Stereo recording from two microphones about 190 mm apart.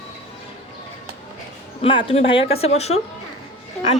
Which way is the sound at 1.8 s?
30° left (ahead or behind).